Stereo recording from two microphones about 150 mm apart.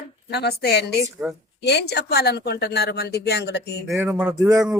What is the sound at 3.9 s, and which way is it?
Speech, 15° right (ahead or behind).